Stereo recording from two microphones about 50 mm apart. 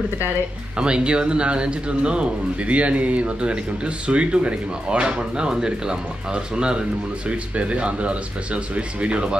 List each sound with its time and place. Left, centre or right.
0.7 s speech: centre